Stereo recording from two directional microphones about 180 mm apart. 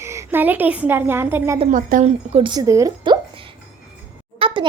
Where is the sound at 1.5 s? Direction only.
40° right (ahead or behind).